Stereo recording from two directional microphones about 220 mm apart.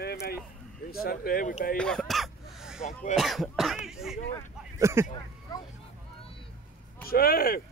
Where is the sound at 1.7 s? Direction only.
5° left (ahead or behind).